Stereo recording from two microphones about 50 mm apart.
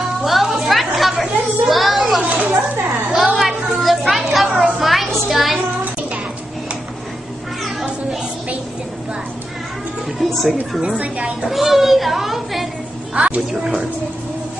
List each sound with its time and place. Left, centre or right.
0.2 s chatter: centre
2.2 s speech: right
3.2 s a sound: centre
4.1 s a child's voice: centre
10.1 s speech: centre
10.8 s speech: right
11.4 s speech: centre
13.1 s a woman's voice: right